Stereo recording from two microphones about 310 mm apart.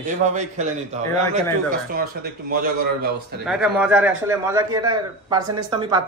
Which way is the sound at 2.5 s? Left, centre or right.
Right.